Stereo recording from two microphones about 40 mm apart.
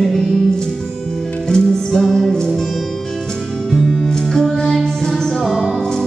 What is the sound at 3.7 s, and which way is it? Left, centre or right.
Music, centre.